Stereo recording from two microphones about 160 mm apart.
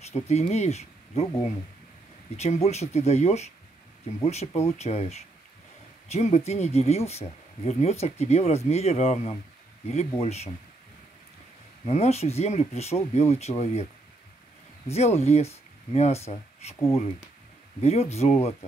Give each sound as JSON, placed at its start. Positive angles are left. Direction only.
{"t": 0.1, "sound": "speech", "side_deg": 45}
{"t": 2.3, "sound": "speech", "side_deg": 45}
{"t": 11.8, "sound": "speech", "side_deg": 45}
{"t": 14.9, "sound": "speech", "side_deg": 40}